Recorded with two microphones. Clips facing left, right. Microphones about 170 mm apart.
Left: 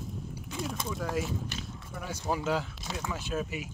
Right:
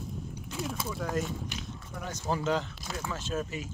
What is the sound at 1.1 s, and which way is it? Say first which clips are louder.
Speech: even; 5° left (ahead or behind).